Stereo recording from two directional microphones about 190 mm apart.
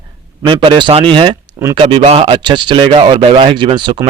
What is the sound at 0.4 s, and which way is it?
Speech, 25° right (ahead or behind).